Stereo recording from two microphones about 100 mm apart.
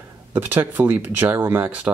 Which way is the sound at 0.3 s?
20° right (ahead or behind).